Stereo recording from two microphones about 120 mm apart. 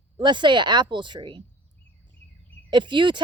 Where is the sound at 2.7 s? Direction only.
40° right (ahead or behind).